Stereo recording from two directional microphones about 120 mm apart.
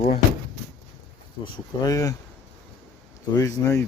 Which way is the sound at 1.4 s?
30° left (ahead or behind).